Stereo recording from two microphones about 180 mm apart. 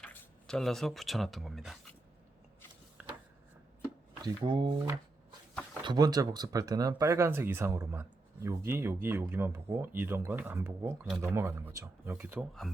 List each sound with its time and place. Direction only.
0.0 s speech: 5° left (ahead or behind)
3.0 s a sound: 5° right (ahead or behind)
4.2 s speech: 25° right (ahead or behind)
5.8 s speech: 25° right (ahead or behind)